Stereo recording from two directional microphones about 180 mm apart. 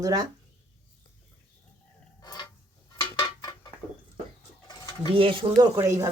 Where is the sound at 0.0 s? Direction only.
20° right (ahead or behind).